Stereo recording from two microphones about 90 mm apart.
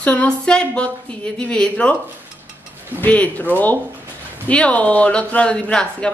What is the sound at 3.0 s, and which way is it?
A woman's voice, 20° left (ahead or behind).